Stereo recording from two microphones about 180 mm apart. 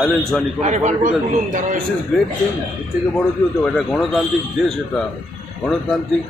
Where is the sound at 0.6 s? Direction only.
45° right (ahead or behind).